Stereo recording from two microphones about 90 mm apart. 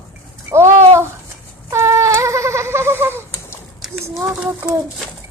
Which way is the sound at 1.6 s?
30° right (ahead or behind).